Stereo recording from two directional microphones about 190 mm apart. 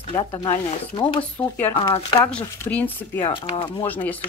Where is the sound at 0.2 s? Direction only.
25° left (ahead or behind).